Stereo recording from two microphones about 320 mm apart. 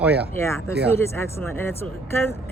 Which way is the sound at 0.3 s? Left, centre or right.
Centre.